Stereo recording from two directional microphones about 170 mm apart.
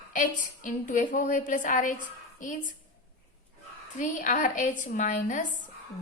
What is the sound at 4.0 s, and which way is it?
A woman's voice, 45° left (ahead or behind).